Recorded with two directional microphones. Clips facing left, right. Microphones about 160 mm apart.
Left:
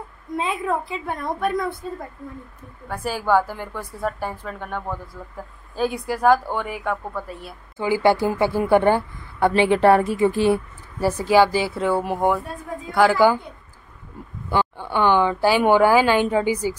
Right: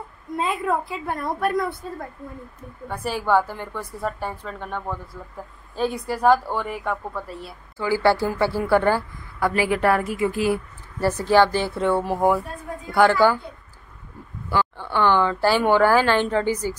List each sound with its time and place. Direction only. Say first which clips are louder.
0.4 s a woman's voice: right 1 dB; centre (ahead or behind)
2.9 s a woman's voice: left 1 dB; centre (ahead or behind)
7.7 s a woman's voice: left 1 dB; 20° left (ahead or behind)
11.0 s a woman's voice: left 1 dB; 10° left (ahead or behind)
14.5 s a woman's voice: left 1 dB; 15° left (ahead or behind)